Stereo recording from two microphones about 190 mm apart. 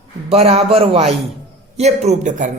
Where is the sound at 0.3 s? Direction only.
35° right (ahead or behind).